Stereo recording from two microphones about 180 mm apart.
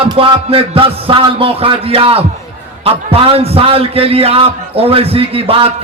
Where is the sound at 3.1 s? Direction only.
30° right (ahead or behind).